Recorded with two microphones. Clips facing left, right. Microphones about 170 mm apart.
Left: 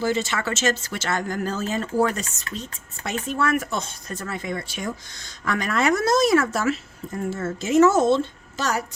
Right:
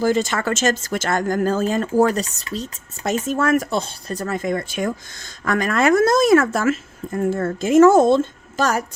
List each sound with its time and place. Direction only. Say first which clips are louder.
0.0 s speech: right 5 dB; 45° right (ahead or behind)